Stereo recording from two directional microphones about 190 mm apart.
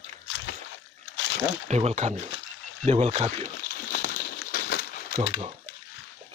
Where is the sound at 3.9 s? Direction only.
50° left (ahead or behind).